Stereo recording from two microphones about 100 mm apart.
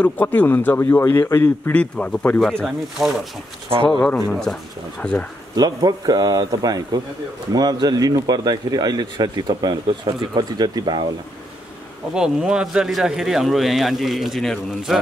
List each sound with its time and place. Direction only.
0.0 s a man's voice: 15° left (ahead or behind)
3.9 s a man's voice: 10° left (ahead or behind)
5.6 s a man's voice: 40° right (ahead or behind)
12.1 s speech: 5° right (ahead or behind)